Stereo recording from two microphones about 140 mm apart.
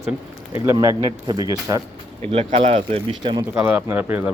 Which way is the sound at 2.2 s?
45° right (ahead or behind).